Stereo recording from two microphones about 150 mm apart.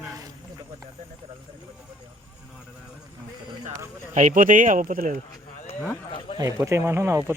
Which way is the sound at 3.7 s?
50° right (ahead or behind).